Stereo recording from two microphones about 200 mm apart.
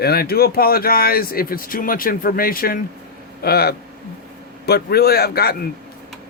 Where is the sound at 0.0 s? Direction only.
50° left (ahead or behind).